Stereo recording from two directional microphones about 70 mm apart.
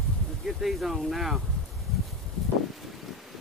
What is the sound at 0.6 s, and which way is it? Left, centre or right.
Speech, centre.